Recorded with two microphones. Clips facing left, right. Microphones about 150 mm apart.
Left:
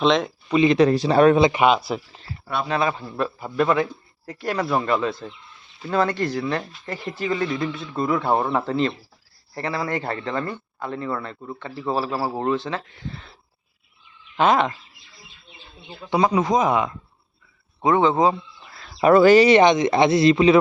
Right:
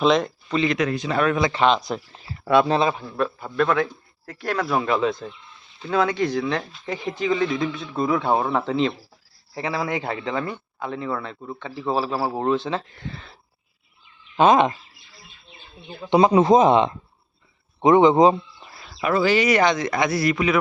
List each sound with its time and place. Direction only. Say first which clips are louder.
0.0 s speech: even; centre (ahead or behind)
0.5 s speech: left 5 dB; 20° left (ahead or behind)
0.8 s speech: left 7 dB; 35° left (ahead or behind)
1.6 s speech: left 1 dB; 5° left (ahead or behind)
2.4 s speech: right 10 dB; 90° right
2.6 s speech: right 2 dB; 25° right (ahead or behind)
3.2 s a man's voice: left 1 dB; 5° left (ahead or behind)
4.7 s a man's voice: right 2 dB; centre (ahead or behind)
14.3 s speech: right 3 dB; 20° right (ahead or behind)
16.0 s speech: right 4 dB; 25° right (ahead or behind)
19.1 s speech: left 7 dB; 50° left (ahead or behind)
19.4 s speech: left 5 dB; 25° left (ahead or behind)